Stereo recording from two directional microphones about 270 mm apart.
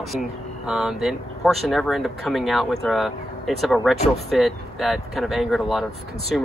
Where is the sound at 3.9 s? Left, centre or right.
Left.